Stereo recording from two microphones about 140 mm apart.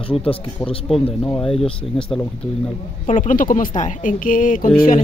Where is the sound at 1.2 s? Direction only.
5° left (ahead or behind).